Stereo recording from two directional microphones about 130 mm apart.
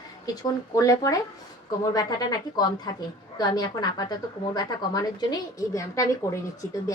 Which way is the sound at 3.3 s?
30° left (ahead or behind).